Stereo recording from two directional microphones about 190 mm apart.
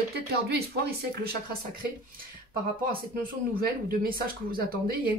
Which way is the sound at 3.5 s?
50° right (ahead or behind).